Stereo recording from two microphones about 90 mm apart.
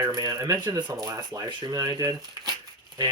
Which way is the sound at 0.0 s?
40° right (ahead or behind).